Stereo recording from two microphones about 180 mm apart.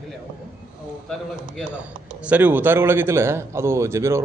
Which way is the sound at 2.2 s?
10° right (ahead or behind).